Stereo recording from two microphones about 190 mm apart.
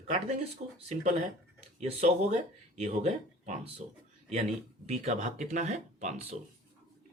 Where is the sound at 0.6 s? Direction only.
40° right (ahead or behind).